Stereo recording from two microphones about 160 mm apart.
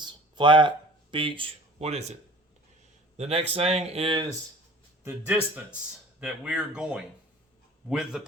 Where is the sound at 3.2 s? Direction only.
40° right (ahead or behind).